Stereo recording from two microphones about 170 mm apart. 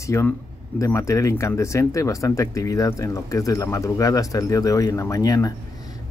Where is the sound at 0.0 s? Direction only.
15° left (ahead or behind).